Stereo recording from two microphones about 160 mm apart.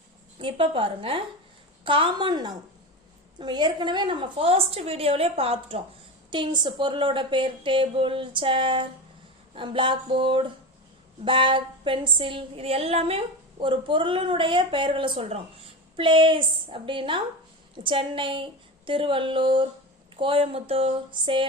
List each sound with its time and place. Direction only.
0.3 s a woman's voice: 35° right (ahead or behind)